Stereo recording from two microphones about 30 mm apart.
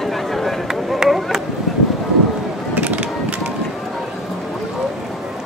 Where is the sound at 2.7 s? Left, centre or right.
Right.